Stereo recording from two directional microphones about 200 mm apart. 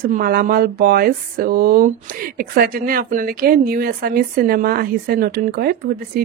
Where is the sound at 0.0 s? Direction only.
45° right (ahead or behind).